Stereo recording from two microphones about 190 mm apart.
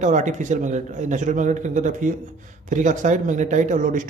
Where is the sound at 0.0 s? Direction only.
40° right (ahead or behind).